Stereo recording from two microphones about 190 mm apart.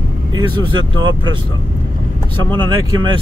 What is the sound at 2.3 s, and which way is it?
Speech, 25° right (ahead or behind).